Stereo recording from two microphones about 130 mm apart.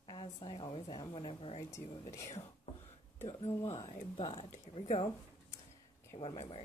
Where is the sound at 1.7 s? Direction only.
25° left (ahead or behind).